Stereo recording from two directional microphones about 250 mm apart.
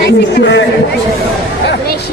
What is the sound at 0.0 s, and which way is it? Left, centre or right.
Speech, left.